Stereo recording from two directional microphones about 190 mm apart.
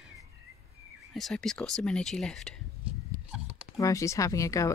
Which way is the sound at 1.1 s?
Centre (ahead or behind).